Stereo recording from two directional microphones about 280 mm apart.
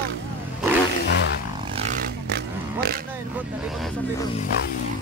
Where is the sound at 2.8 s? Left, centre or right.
Right.